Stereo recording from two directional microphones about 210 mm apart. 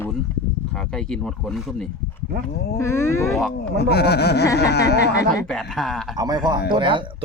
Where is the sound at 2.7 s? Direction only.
15° left (ahead or behind).